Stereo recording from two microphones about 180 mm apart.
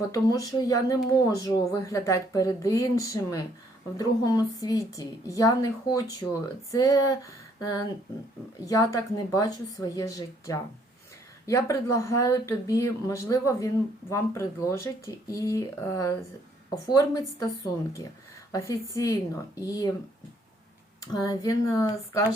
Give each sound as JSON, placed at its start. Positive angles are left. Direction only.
{"t": 0.1, "sound": "speech", "side_deg": 20}
{"t": 18.5, "sound": "speech", "side_deg": 15}
{"t": 21.0, "sound": "speech", "side_deg": 20}